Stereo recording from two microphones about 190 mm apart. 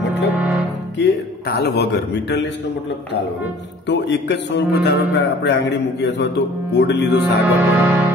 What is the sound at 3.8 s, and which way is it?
A man's voice, 65° left (ahead or behind).